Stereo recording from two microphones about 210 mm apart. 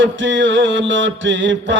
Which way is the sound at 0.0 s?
60° right (ahead or behind).